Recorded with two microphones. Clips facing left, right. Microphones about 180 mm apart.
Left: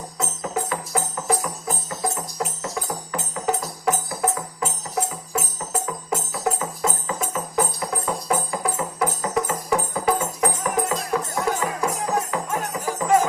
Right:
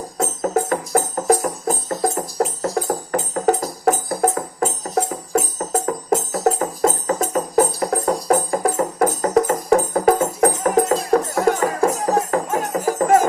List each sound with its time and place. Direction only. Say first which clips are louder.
0.2 s music: right 7 dB; 45° right (ahead or behind)